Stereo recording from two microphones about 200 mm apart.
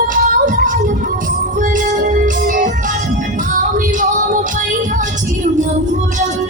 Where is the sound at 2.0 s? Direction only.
40° right (ahead or behind).